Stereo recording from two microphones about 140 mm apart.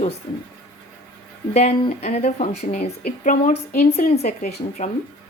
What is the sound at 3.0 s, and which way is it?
Speech, 70° left (ahead or behind).